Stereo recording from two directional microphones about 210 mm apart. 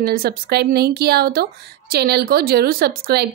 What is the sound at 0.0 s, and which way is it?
Speech, 45° right (ahead or behind).